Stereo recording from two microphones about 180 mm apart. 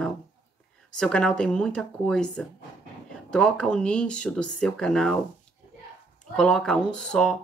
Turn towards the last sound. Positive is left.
turn(degrees=5)  # may be behind; listen again after turning